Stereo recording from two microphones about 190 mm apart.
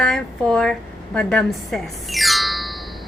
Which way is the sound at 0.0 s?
Centre (ahead or behind).